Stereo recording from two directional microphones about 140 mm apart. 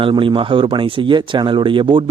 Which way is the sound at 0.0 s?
35° right (ahead or behind).